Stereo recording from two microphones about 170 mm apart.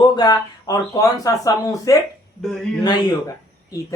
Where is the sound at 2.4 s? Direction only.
Centre (ahead or behind).